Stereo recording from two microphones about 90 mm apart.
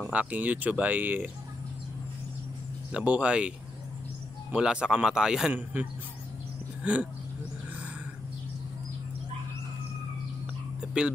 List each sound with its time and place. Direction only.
0.1 s speech: 15° right (ahead or behind)
2.9 s speech: 10° right (ahead or behind)
4.6 s speech: 10° right (ahead or behind)
5.5 s speech: 20° right (ahead or behind)